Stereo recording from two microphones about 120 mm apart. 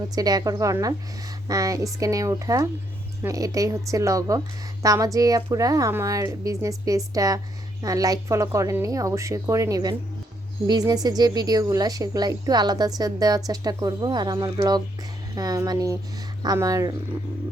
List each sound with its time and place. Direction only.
0.1 s a woman's voice: 35° right (ahead or behind)